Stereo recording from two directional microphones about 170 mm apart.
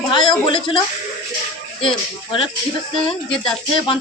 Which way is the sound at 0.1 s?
30° left (ahead or behind).